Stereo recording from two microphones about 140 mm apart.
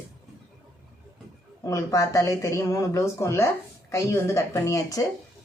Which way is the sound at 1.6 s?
20° left (ahead or behind).